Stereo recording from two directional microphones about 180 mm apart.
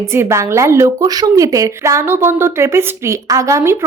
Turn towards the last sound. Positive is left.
turn(degrees=-15)  # may be behind; listen again after turning